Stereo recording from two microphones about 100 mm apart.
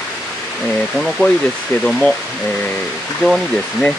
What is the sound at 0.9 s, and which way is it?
Speech, centre (ahead or behind).